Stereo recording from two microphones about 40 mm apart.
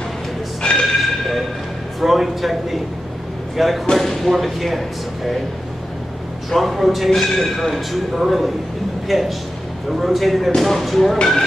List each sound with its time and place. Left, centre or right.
0.6 s music: left
2.0 s speech: centre
6.5 s speech: centre